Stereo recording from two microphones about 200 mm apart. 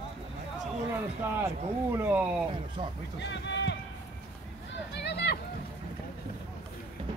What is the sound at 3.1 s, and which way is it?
Speech, 60° left (ahead or behind).